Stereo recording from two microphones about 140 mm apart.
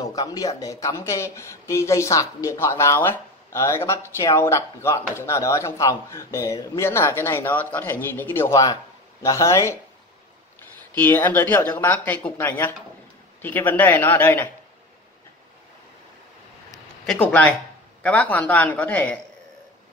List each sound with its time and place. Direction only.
0.0 s speech: 25° left (ahead or behind)
11.0 s speech: 15° left (ahead or behind)
16.7 s a sound: 5° left (ahead or behind)
18.0 s speech: 10° left (ahead or behind)